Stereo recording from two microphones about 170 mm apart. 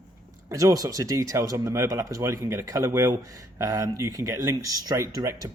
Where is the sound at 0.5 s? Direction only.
20° right (ahead or behind).